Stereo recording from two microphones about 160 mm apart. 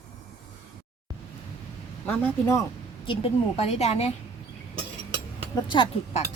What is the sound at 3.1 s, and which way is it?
A woman's voice, 40° left (ahead or behind).